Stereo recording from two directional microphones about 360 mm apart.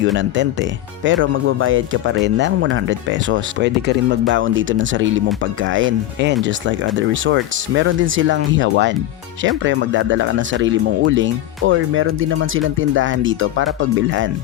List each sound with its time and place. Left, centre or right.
0.0 s speech: right